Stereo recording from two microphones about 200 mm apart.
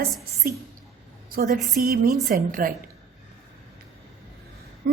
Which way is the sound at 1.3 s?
45° right (ahead or behind).